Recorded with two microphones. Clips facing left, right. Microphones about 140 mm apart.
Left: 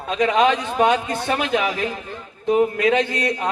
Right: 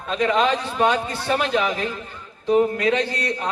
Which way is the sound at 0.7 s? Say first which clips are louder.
Left 2 dB; 45° left (ahead or behind).